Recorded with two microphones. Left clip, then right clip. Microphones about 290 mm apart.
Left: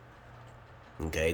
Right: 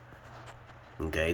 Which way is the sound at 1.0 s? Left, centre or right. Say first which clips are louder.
Right 2 dB; centre.